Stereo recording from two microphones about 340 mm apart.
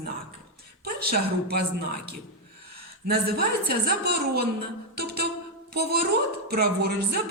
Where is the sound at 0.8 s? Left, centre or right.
Right.